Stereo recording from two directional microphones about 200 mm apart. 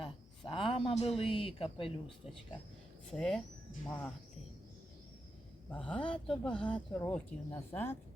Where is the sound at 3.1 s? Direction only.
5° left (ahead or behind).